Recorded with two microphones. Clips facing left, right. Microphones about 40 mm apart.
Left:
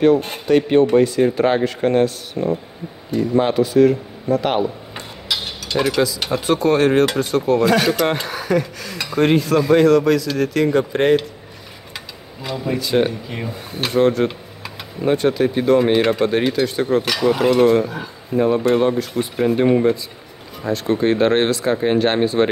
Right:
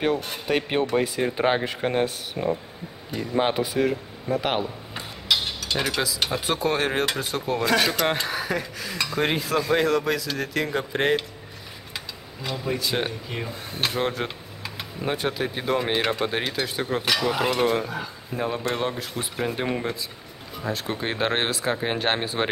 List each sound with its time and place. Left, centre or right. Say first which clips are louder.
0.5 s speech: left 10 dB; centre
12.4 s speech: left 5 dB; centre